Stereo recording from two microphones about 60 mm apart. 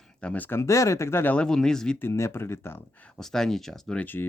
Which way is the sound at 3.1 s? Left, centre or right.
Centre.